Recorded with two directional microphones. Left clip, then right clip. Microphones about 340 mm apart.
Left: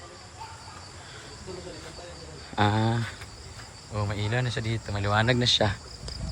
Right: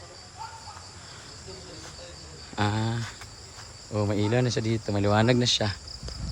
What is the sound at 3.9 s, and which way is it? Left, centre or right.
Speech, centre.